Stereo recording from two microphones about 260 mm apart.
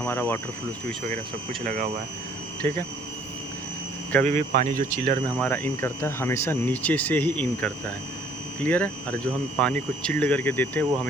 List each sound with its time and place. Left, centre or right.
0.0 s speech: centre
1.6 s speech: right
4.3 s speech: right
5.4 s speech: centre